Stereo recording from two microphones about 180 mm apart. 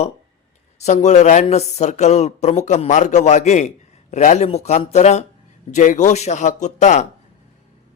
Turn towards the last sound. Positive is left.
turn(degrees=40)  # may be behind; listen again after turning